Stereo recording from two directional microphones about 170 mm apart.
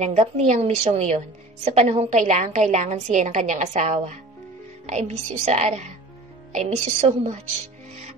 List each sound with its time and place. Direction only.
0.0 s a woman's voice: 40° right (ahead or behind)